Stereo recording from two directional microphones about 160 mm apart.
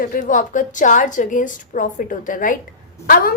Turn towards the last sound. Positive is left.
turn(degrees=60)  # may be behind; listen again after turning